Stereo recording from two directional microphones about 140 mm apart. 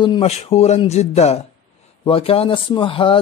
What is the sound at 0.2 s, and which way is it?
Speech, 45° left (ahead or behind).